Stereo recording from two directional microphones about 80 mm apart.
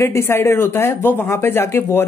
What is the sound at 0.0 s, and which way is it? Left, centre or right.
Speech, left.